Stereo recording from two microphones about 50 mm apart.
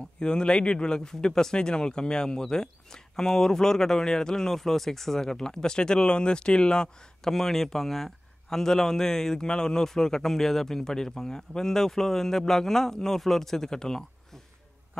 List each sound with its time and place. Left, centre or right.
0.2 s speech: centre